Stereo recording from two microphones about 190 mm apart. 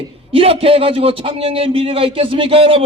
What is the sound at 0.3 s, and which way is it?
A man's voice, 30° right (ahead or behind).